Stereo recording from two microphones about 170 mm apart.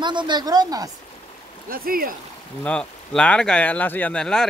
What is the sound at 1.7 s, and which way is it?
Speech, 60° right (ahead or behind).